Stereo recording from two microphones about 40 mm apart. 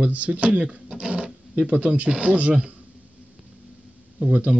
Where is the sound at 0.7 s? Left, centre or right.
Right.